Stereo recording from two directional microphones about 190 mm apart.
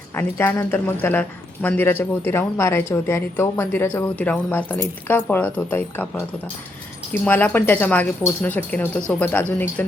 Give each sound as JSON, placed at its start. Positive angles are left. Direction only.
{"t": 0.2, "sound": "speech", "side_deg": 10}